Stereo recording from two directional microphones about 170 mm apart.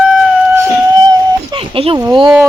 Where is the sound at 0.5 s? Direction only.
25° right (ahead or behind).